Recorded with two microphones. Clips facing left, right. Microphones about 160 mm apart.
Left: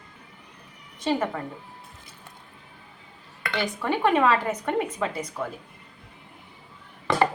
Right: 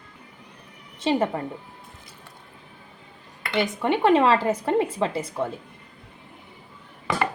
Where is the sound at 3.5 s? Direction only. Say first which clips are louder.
Right 4 dB; 25° right (ahead or behind).